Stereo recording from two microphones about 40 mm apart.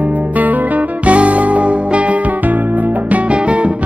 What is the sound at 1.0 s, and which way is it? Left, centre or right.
Music, right.